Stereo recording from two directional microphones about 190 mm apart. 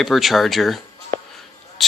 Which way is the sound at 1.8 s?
Centre (ahead or behind).